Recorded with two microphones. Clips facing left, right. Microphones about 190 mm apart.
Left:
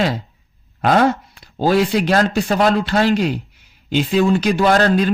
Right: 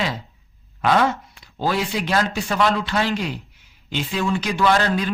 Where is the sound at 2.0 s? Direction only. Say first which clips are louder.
Left 6 dB; 40° left (ahead or behind).